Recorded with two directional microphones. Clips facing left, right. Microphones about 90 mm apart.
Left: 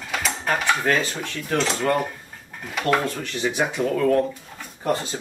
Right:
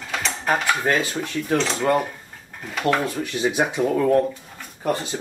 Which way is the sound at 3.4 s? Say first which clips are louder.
Right 3 dB; 15° right (ahead or behind).